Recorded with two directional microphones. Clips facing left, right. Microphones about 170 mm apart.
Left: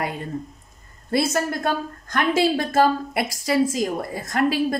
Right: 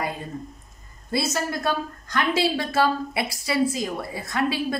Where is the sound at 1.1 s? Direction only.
50° left (ahead or behind).